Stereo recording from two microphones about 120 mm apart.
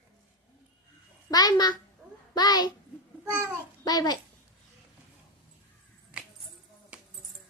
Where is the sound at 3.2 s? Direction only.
25° right (ahead or behind).